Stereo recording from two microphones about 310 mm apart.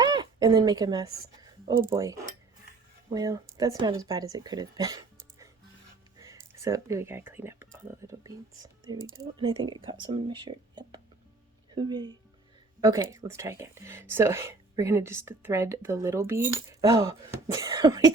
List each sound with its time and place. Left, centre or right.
0.0 s speech: centre